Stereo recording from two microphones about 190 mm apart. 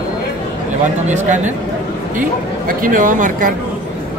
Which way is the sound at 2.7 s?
45° right (ahead or behind).